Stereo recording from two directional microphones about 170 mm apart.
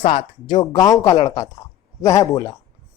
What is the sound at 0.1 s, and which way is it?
Speech, 25° left (ahead or behind).